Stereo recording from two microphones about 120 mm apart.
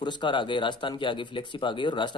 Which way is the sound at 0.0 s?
40° left (ahead or behind).